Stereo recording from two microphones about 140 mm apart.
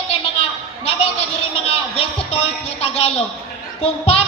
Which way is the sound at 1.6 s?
45° left (ahead or behind).